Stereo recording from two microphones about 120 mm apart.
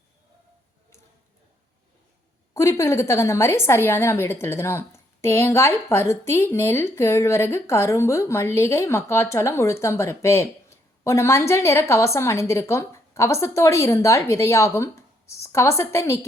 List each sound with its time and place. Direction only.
2.6 s a woman's voice: 25° left (ahead or behind)